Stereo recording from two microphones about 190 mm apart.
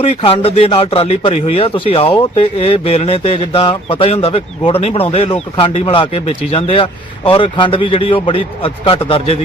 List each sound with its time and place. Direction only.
0.0 s a man's voice: 30° left (ahead or behind)